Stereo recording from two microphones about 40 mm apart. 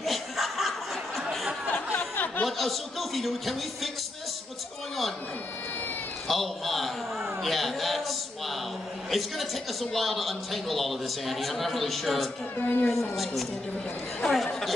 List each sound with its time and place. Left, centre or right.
0.0 s chuckle: centre
2.0 s a sound: left
2.4 s a man's voice: centre
6.2 s a sound: centre
9.1 s a man's voice: centre
12.5 s speech: left
13.1 s a man's voice: centre